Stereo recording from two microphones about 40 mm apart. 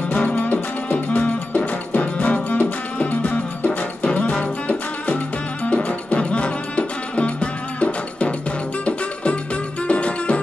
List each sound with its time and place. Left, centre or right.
0.1 s music: left